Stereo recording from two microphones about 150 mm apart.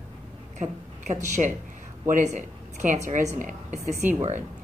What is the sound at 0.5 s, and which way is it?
A woman's voice, 55° right (ahead or behind).